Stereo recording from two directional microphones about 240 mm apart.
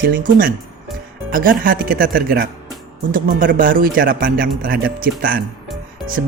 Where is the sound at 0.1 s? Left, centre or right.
Right.